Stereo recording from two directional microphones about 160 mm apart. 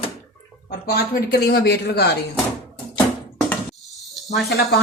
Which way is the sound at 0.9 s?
80° left.